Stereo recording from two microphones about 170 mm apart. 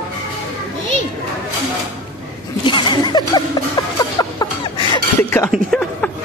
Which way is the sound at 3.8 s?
25° left (ahead or behind).